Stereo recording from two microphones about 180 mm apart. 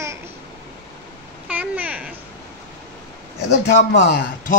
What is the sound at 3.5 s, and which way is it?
A man's voice, 65° left (ahead or behind).